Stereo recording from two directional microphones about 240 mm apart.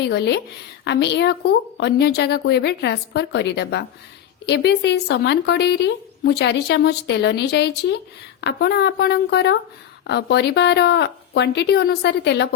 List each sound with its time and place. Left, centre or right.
0.0 s a woman's voice: left